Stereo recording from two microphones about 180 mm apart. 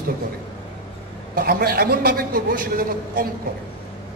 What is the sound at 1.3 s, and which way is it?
A man's voice, 55° right (ahead or behind).